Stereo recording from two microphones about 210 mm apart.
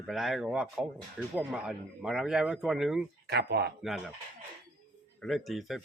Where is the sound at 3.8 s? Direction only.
Centre (ahead or behind).